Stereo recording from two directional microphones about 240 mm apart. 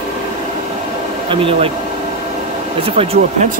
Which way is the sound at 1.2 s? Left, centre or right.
Right.